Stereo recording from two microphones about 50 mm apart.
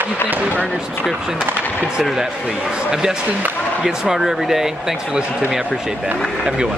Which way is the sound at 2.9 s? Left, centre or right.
Centre.